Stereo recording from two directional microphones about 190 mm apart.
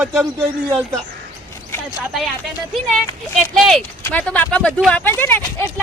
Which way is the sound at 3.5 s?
Centre (ahead or behind).